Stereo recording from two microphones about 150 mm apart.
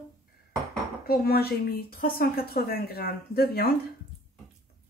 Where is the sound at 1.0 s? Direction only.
90° left.